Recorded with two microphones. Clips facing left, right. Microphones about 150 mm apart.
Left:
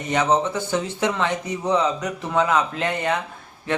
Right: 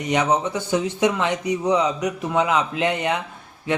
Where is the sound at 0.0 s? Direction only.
15° right (ahead or behind).